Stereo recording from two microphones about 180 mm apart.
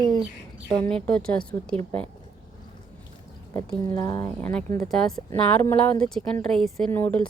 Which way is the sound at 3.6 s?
15° left (ahead or behind).